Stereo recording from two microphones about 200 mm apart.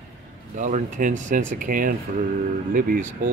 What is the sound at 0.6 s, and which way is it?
Speech, 40° right (ahead or behind).